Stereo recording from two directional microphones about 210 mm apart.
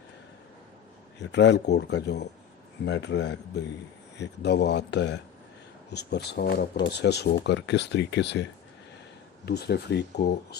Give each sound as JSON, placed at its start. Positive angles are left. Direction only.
{"t": 1.2, "sound": "speech", "side_deg": 55}
{"t": 9.5, "sound": "speech", "side_deg": 50}